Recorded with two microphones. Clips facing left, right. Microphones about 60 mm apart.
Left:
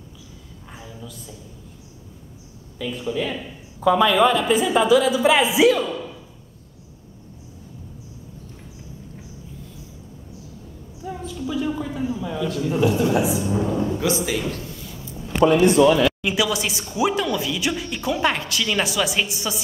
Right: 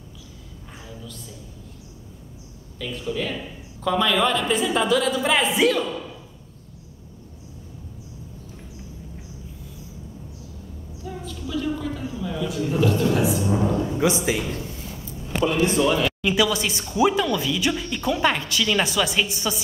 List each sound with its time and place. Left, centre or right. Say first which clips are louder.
0.7 s a woman's voice: left 1 dB; centre
2.8 s a man's voice: left 2 dB; centre
11.1 s a sound: left 4 dB; centre
12.4 s speech: left 1 dB; centre
12.7 s a man's voice: left 2 dB; centre
13.5 s speech: even; right
16.2 s speech: right 1 dB; centre